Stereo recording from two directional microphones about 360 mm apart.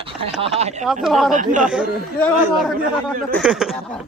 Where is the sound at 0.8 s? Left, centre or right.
Centre.